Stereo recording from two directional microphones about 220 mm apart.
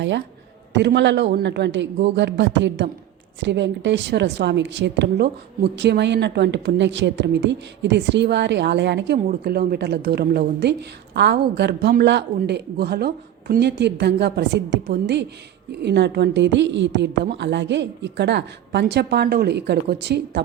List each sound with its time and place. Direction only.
0.7 s a woman's voice: 50° right (ahead or behind)